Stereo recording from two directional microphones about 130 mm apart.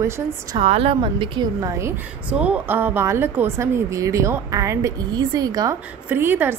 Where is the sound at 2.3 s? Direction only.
10° right (ahead or behind); by 5.7 s 30° right (ahead or behind).